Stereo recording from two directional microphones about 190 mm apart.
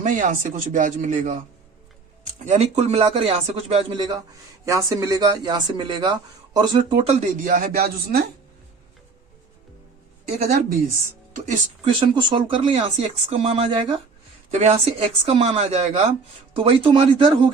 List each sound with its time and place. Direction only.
0.0 s a man's voice: 45° right (ahead or behind)
2.4 s a man's voice: 35° right (ahead or behind)
7.4 s speech: 45° right (ahead or behind)
10.2 s speech: 55° right (ahead or behind)
11.9 s a man's voice: 25° right (ahead or behind)